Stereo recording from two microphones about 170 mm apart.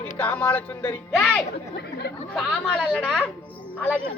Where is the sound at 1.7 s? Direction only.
85° left.